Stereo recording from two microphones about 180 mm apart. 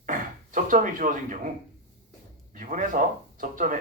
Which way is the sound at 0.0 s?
45° right (ahead or behind).